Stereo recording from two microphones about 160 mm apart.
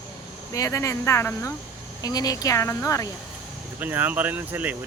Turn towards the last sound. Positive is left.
turn(degrees=-10)  # may be behind; listen again after turning